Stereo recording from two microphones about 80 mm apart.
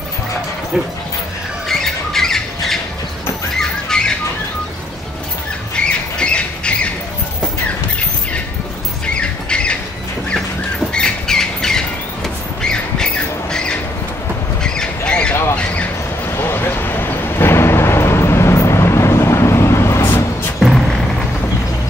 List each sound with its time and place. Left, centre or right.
1.7 s squawk: centre
3.5 s bird: centre
5.9 s squawk: centre
9.1 s squawk: centre
10.9 s squawk: centre
16.3 s a sound: left
20.5 s a sound: centre